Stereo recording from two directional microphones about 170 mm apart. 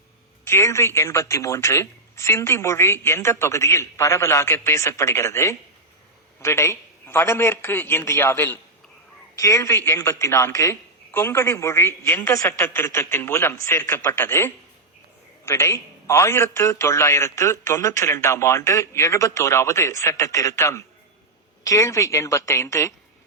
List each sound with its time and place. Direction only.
0.4 s a man's voice: 15° left (ahead or behind)